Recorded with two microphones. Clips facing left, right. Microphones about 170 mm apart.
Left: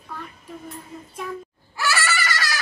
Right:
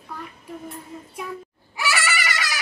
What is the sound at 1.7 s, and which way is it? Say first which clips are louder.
Goat: left 1 dB; 15° right (ahead or behind).